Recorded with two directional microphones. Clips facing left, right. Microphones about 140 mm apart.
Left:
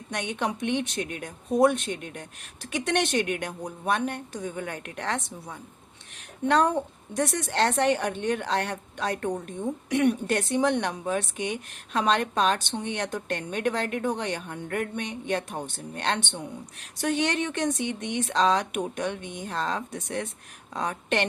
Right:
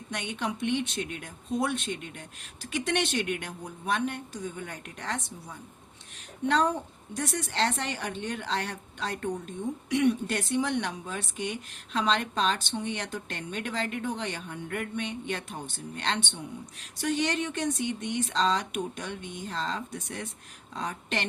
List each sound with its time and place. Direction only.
0.1 s a woman's voice: 50° left (ahead or behind); by 5.5 s 65° left (ahead or behind)
7.2 s a woman's voice: 55° left (ahead or behind)